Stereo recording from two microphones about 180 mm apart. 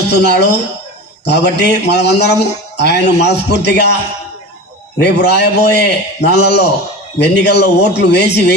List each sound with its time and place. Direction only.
0.1 s a man's voice: 65° left (ahead or behind)
4.9 s a man's voice: 65° left (ahead or behind)